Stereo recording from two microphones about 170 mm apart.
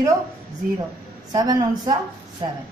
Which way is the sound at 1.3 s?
25° right (ahead or behind).